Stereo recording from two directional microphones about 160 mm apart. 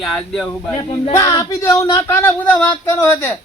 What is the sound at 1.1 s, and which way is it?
Speech, 20° left (ahead or behind).